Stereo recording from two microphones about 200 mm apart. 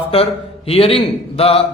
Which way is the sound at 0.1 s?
30° left (ahead or behind).